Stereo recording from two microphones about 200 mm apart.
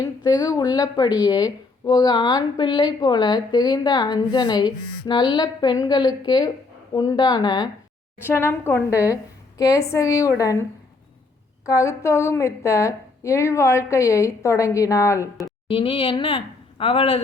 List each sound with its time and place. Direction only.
0.5 s a woman's voice: 20° left (ahead or behind)
15.6 s speech: 25° left (ahead or behind)